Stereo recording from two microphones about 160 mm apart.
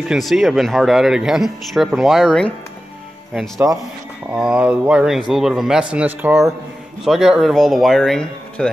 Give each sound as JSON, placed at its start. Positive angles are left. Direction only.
{"t": 0.1, "sound": "speech", "side_deg": 0}
{"t": 3.5, "sound": "a man's voice", "side_deg": -20}
{"t": 4.3, "sound": "speech", "side_deg": -5}
{"t": 7.1, "sound": "speech", "side_deg": -5}